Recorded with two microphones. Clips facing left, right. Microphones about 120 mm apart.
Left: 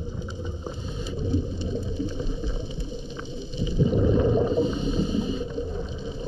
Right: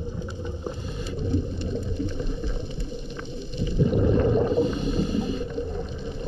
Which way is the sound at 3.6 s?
55° right (ahead or behind).